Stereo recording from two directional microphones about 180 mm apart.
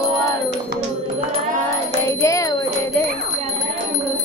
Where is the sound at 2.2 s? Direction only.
15° left (ahead or behind).